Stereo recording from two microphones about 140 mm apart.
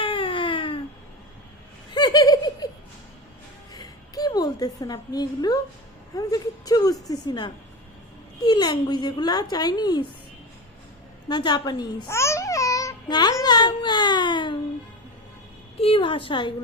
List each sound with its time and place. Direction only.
0.0 s baby cry: 35° left (ahead or behind)
1.9 s giggle: 30° left (ahead or behind)
3.8 s a sound: 25° left (ahead or behind)
6.1 s a woman's voice: 30° left (ahead or behind)
11.3 s a woman's voice: 30° left (ahead or behind)
12.0 s babbling: 20° left (ahead or behind)
15.8 s a woman's voice: 40° left (ahead or behind)